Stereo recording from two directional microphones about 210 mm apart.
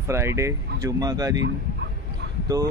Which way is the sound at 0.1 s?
15° right (ahead or behind).